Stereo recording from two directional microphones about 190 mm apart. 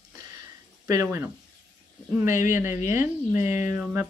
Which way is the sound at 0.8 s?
15° right (ahead or behind).